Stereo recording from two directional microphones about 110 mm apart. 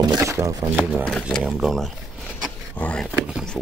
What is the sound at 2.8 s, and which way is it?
Speech, 10° left (ahead or behind).